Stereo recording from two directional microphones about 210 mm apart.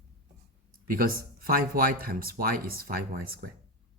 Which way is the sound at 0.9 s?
45° right (ahead or behind).